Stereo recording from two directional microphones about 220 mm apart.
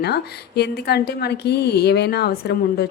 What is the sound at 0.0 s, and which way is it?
A woman's voice, 45° left (ahead or behind).